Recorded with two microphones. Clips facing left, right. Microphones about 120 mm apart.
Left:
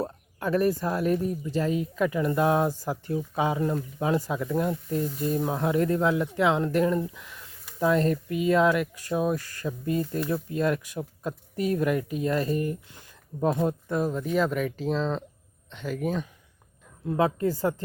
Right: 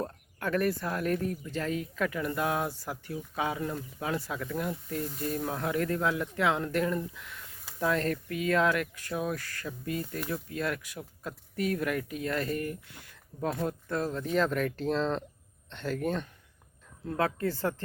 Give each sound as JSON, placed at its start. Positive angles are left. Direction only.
{"t": 0.3, "sound": "speech", "side_deg": 15}
{"t": 2.6, "sound": "speech", "side_deg": 15}
{"t": 3.1, "sound": "speech", "side_deg": 30}
{"t": 17.1, "sound": "speech", "side_deg": 15}